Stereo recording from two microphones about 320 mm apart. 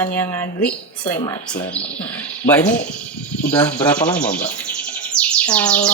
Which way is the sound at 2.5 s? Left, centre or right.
Centre.